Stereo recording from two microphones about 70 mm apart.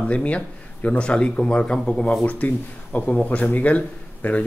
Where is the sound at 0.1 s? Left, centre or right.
Centre.